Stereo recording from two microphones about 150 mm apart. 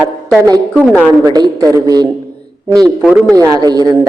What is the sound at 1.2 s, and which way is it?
Speech, 25° right (ahead or behind).